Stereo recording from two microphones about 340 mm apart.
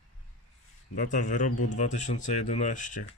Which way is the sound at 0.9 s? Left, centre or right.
Left.